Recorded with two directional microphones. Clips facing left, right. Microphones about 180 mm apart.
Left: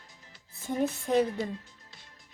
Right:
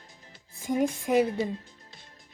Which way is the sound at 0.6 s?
10° right (ahead or behind).